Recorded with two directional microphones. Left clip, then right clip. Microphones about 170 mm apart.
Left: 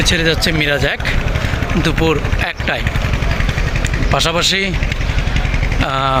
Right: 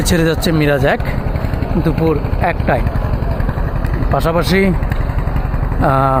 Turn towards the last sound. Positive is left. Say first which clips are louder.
# right 2 dB
turn(degrees=-15)  # may be behind; listen again after turning